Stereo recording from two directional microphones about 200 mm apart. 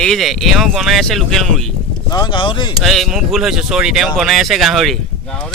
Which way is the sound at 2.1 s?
20° left (ahead or behind).